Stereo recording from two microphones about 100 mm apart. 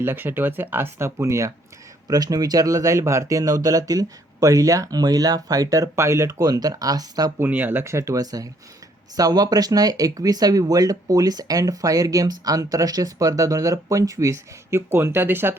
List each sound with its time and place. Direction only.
0.0 s speech: 20° right (ahead or behind); by 7.3 s 40° right (ahead or behind)
7.3 s speech: 20° right (ahead or behind)